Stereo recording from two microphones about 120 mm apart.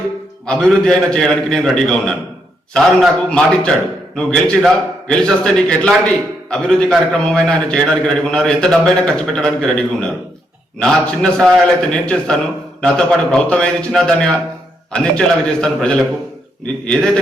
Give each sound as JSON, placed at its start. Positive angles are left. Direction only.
{"t": 0.4, "sound": "a man's voice", "side_deg": 5}